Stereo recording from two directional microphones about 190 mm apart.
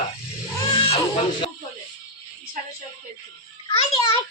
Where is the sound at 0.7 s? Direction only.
30° left (ahead or behind).